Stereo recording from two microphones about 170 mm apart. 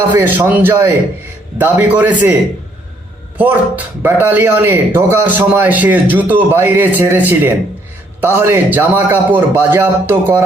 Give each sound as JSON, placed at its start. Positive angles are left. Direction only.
{"t": 0.1, "sound": "speech", "side_deg": -10}
{"t": 3.3, "sound": "speech", "side_deg": -10}